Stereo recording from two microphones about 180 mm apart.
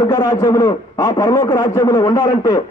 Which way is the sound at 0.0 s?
20° left (ahead or behind).